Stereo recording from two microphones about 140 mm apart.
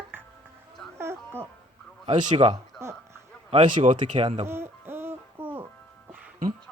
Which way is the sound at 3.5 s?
35° right (ahead or behind).